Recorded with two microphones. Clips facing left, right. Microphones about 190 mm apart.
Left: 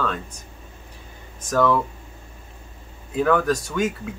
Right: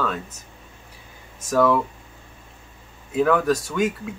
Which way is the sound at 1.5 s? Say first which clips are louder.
Right 1 dB; 5° right (ahead or behind).